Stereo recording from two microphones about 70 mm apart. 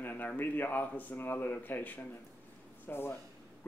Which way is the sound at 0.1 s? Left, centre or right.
Left.